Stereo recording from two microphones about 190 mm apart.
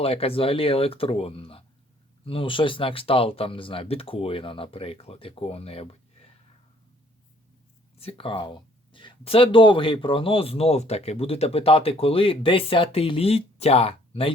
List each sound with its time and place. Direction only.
0.0 s speech: 30° left (ahead or behind)
7.9 s speech: 30° left (ahead or behind)